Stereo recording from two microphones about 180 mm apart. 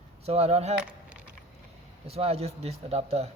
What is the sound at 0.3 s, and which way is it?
Speech, 35° right (ahead or behind).